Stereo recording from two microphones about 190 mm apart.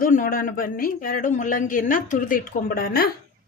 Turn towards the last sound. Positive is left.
turn(degrees=50)  # may be behind; listen again after turning